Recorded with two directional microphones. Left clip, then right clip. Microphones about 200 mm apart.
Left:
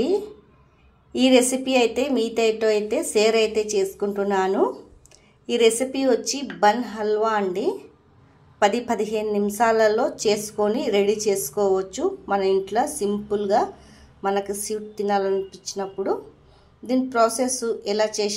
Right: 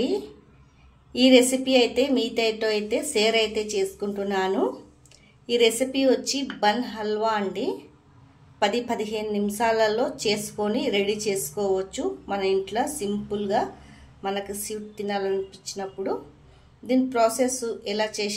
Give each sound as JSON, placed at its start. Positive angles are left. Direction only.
{"t": 1.1, "sound": "a woman's voice", "side_deg": 15}